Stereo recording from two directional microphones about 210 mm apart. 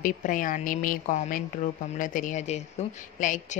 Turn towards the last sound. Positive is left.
turn(degrees=35)  # may be behind; listen again after turning